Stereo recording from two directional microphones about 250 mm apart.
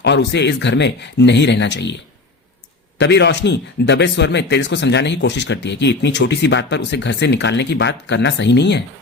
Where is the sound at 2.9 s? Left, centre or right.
Left.